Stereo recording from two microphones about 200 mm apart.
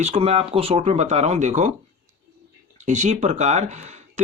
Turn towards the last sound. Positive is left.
turn(degrees=-35)  # may be behind; listen again after turning